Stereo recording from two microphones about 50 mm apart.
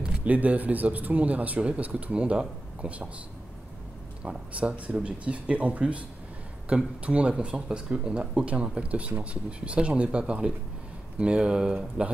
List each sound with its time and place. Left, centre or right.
0.0 s a sound: centre
0.3 s speech: right
4.2 s speech: right